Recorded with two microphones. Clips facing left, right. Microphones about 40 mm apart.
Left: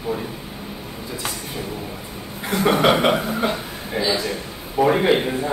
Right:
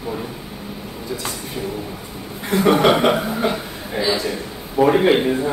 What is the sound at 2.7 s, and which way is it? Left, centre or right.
Speech, centre.